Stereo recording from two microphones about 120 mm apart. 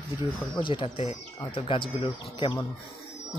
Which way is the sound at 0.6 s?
50° left (ahead or behind).